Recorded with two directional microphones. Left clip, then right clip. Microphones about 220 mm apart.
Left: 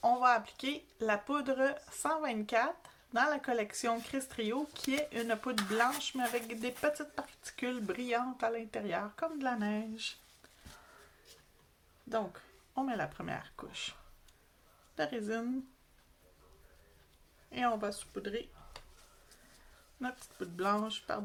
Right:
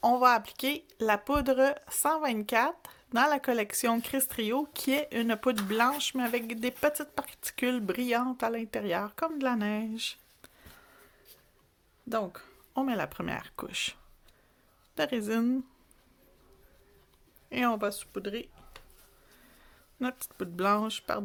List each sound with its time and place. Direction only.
0.0 s speech: 50° right (ahead or behind)
12.0 s speech: 55° right (ahead or behind)
14.9 s speech: 55° right (ahead or behind)
17.5 s speech: 50° right (ahead or behind)
20.0 s speech: 55° right (ahead or behind)